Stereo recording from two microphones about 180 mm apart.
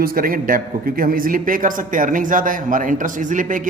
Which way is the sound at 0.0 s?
55° right (ahead or behind).